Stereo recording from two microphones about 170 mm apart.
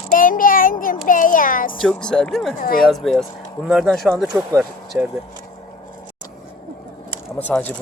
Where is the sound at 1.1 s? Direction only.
50° left (ahead or behind).